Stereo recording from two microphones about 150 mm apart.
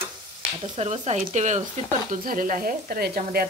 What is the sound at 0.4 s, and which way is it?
Speech, 45° right (ahead or behind).